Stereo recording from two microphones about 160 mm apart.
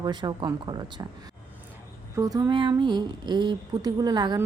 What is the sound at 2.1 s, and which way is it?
A woman's voice, 20° right (ahead or behind).